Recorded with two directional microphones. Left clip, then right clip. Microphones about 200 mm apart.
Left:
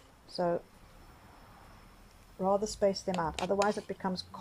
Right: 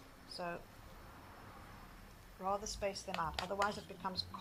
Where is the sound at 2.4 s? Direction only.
35° left (ahead or behind).